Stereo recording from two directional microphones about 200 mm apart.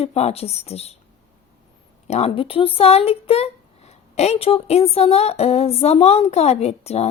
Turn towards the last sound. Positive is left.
turn(degrees=30)  # may be behind; listen again after turning